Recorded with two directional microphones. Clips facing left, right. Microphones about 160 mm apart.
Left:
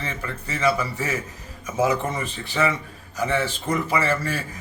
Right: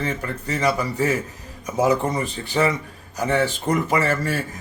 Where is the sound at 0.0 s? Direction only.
45° right (ahead or behind).